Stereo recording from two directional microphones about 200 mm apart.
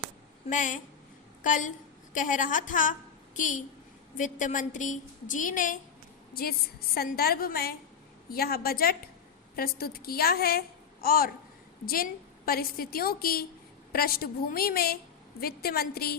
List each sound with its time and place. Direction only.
0.5 s a woman's voice: 40° left (ahead or behind)
12.5 s a woman's voice: 50° left (ahead or behind)